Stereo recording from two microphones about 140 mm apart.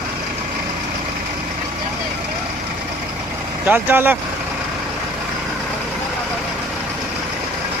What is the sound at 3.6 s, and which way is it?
Speech, 15° right (ahead or behind).